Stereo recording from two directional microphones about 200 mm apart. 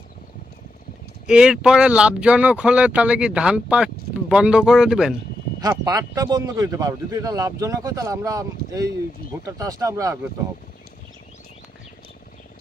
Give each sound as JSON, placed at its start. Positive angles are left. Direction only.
{"t": 1.3, "sound": "speech", "side_deg": -5}
{"t": 5.5, "sound": "speech", "side_deg": -15}